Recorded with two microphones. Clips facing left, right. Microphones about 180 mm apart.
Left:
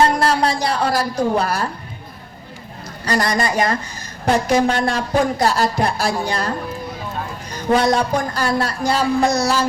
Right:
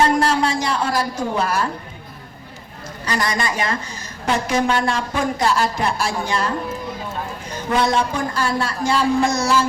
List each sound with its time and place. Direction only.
0.0 s speech: 35° left (ahead or behind)
3.0 s speech: 35° left (ahead or behind)
7.9 s speech: 40° left (ahead or behind)